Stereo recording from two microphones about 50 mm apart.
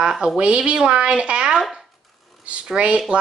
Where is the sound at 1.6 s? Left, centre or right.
Centre.